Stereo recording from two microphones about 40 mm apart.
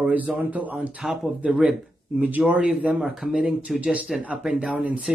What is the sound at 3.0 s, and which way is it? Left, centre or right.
Speech, centre.